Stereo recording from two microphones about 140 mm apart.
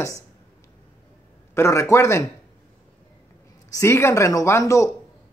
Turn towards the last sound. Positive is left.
turn(degrees=20)  # may be behind; listen again after turning